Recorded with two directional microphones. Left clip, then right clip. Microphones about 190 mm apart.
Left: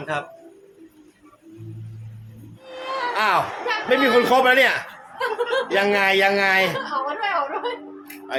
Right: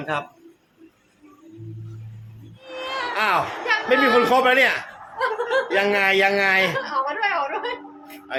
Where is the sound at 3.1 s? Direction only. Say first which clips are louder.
Left 1 dB; 5° left (ahead or behind).